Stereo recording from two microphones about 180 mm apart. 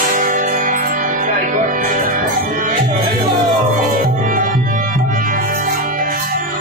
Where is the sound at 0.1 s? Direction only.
50° right (ahead or behind).